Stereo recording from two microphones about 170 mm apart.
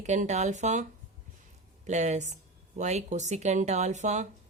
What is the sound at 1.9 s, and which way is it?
A woman's voice, 45° right (ahead or behind).